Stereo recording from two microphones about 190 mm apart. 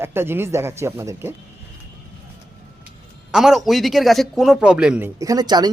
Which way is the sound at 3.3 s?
5° right (ahead or behind).